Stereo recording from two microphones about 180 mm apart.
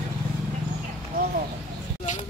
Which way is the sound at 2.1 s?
45° left (ahead or behind).